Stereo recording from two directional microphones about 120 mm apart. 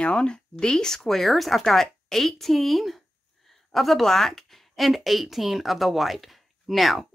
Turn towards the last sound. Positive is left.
turn(degrees=0)  # may be behind; listen again after turning